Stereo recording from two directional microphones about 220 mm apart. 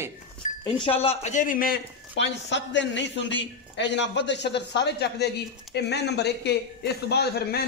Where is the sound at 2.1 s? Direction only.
55° left (ahead or behind).